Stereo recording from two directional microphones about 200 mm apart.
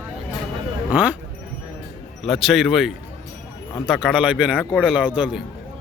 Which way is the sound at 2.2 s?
Centre (ahead or behind).